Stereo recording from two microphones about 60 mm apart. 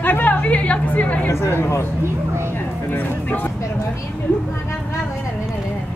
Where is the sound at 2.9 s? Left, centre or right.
Left.